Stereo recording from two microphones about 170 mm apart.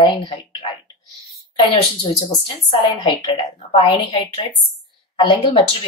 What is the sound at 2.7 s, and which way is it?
A woman's voice, 25° left (ahead or behind).